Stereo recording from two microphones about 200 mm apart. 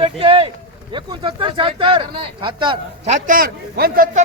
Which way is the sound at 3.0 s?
40° right (ahead or behind).